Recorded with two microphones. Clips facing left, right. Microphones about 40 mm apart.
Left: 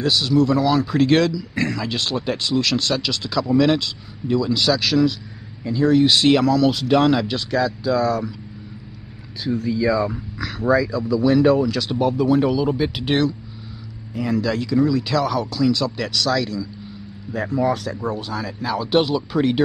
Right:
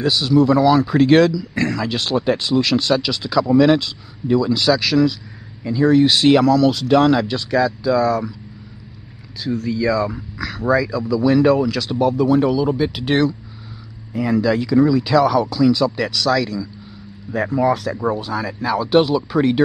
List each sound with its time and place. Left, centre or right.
0.0 s speech: centre
0.4 s speech: right
1.3 s speech: centre
1.8 s speech: centre
6.4 s speech: centre
9.4 s speech: centre
14.1 s speech: centre
17.3 s speech: centre
17.6 s speech: centre
17.9 s speech: centre